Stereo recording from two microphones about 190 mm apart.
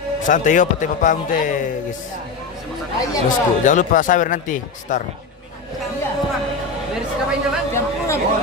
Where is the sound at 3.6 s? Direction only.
40° left (ahead or behind).